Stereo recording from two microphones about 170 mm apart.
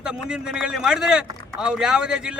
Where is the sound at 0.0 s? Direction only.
5° right (ahead or behind).